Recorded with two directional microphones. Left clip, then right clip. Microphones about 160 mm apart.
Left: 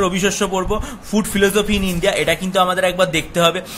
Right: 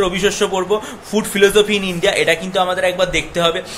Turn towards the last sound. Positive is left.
turn(degrees=40)  # may be behind; listen again after turning